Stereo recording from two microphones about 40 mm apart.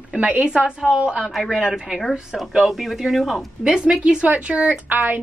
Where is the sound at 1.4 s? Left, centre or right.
Centre.